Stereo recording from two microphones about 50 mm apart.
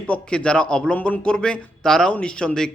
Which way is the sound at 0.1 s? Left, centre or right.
Left.